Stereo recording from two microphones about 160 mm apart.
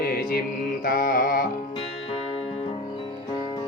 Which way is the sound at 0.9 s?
60° left (ahead or behind).